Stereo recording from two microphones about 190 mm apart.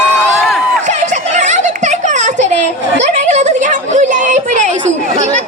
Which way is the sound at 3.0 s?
40° right (ahead or behind).